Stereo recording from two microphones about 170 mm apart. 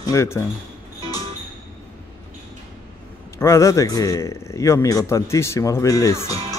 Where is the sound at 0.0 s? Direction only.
15° left (ahead or behind).